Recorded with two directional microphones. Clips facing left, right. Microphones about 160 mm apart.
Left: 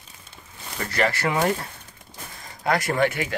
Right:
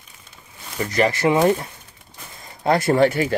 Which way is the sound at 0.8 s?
20° right (ahead or behind).